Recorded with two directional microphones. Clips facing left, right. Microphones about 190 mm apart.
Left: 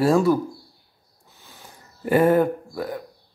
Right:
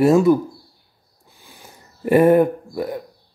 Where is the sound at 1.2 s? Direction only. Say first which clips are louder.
Right 2 dB; 15° right (ahead or behind).